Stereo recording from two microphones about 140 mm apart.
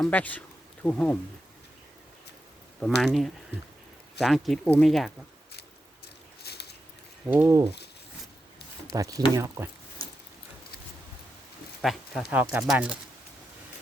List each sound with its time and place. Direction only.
0.0 s speech: 10° left (ahead or behind)
2.8 s speech: centre (ahead or behind)
7.3 s speech: 20° right (ahead or behind)
8.9 s speech: 25° right (ahead or behind)
11.8 s speech: centre (ahead or behind)